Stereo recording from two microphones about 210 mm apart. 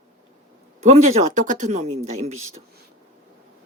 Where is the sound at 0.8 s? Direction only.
30° right (ahead or behind).